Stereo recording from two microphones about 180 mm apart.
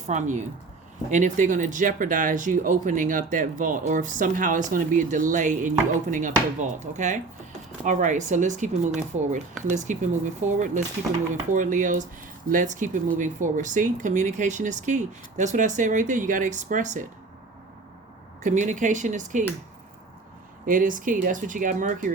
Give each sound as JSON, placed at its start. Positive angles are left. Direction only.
{"t": 0.1, "sound": "speech", "side_deg": -40}
{"t": 18.4, "sound": "speech", "side_deg": -45}
{"t": 20.7, "sound": "speech", "side_deg": -50}